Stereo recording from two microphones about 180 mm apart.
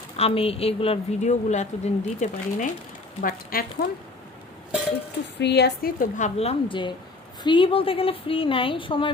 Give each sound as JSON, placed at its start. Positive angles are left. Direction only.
{"t": 0.2, "sound": "a woman's voice", "side_deg": 35}
{"t": 3.2, "sound": "a woman's voice", "side_deg": 55}
{"t": 5.4, "sound": "a woman's voice", "side_deg": 70}